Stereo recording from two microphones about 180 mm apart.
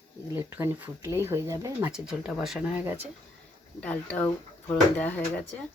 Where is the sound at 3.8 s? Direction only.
10° left (ahead or behind).